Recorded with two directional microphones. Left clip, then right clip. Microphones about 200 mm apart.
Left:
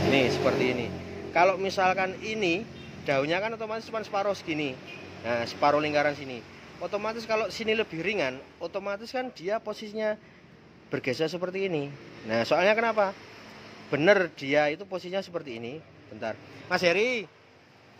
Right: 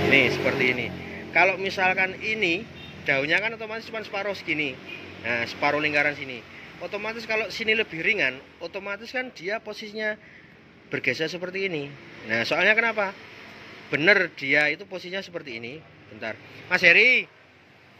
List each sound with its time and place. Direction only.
0.1 s a man's voice: 5° left (ahead or behind)